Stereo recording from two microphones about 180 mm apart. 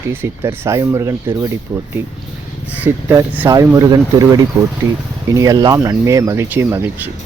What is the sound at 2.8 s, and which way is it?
Speech, 10° right (ahead or behind).